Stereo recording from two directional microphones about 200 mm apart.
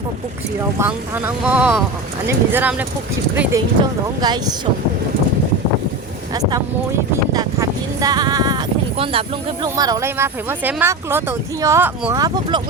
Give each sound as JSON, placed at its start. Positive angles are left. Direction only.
{"t": 0.8, "sound": "speech", "side_deg": -10}
{"t": 3.8, "sound": "speech", "side_deg": -25}
{"t": 7.3, "sound": "speech", "side_deg": -20}